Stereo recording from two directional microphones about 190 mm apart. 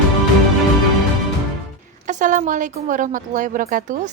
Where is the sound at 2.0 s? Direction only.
40° right (ahead or behind).